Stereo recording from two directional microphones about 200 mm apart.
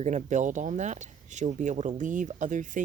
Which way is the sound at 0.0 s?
35° right (ahead or behind).